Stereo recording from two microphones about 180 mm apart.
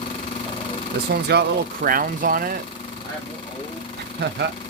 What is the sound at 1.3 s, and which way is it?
Speech, 60° right (ahead or behind).